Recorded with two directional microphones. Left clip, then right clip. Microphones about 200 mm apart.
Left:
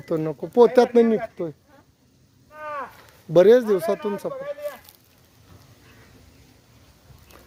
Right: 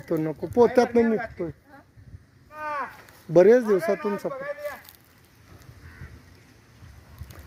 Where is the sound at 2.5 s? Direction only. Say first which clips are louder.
Right 1 dB; 25° right (ahead or behind).